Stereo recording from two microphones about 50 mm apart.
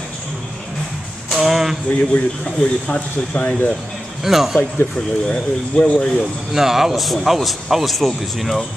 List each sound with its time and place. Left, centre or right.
1.3 s a sound: centre
1.9 s speech: left
4.2 s a man's voice: centre
4.9 s speech: centre
6.5 s a man's voice: centre